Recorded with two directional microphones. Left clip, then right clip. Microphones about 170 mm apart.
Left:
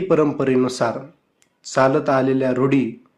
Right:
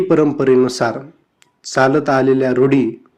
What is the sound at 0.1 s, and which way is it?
A man's voice, 15° right (ahead or behind).